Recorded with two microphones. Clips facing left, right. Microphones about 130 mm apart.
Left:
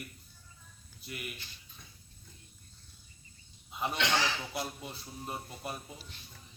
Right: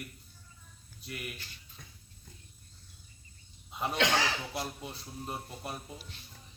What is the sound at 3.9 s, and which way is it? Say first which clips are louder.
Speech: right 2 dB; 45° right (ahead or behind).